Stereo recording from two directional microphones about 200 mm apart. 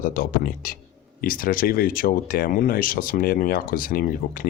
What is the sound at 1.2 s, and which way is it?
Speech, 45° left (ahead or behind).